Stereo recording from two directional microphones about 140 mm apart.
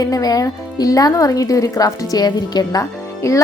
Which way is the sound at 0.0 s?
25° left (ahead or behind).